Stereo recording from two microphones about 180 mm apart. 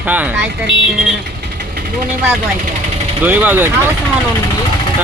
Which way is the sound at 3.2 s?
10° right (ahead or behind).